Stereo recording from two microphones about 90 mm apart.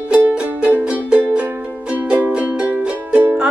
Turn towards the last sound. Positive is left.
turn(degrees=-15)  # may be behind; listen again after turning